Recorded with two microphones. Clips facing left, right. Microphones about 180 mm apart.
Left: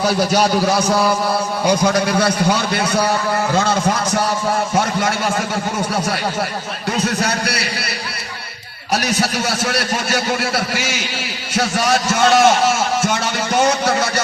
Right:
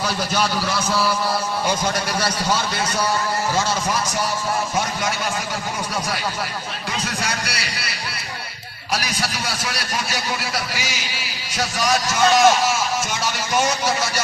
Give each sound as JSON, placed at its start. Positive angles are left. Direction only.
{"t": 0.0, "sound": "a man's voice", "side_deg": 60}
{"t": 7.0, "sound": "a man's voice", "side_deg": 60}
{"t": 8.9, "sound": "a man's voice", "side_deg": 60}